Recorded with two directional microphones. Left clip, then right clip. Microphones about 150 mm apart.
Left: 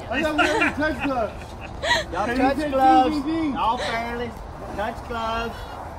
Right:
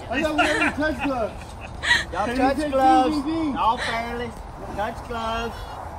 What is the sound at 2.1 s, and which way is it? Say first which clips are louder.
Speech: even; 35° right (ahead or behind).